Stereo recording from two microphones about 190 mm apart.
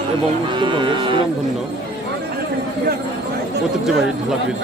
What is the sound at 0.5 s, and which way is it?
Music, 25° right (ahead or behind).